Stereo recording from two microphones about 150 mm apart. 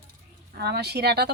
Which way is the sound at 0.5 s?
90° right.